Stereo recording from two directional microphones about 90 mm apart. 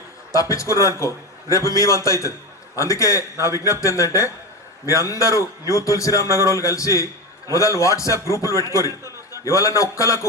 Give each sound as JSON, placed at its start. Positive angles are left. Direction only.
{"t": 0.3, "sound": "a man's voice", "side_deg": 35}